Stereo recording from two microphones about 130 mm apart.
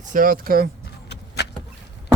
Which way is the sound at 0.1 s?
90° right.